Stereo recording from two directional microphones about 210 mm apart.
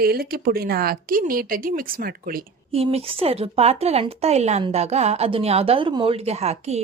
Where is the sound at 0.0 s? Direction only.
45° right (ahead or behind).